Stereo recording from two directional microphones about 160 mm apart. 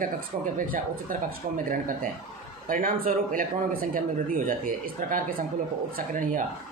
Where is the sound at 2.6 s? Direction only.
60° right (ahead or behind).